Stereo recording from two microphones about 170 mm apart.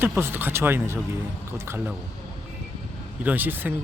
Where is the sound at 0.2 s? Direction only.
10° right (ahead or behind).